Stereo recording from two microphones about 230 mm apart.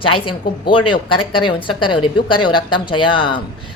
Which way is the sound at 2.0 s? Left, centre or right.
Left.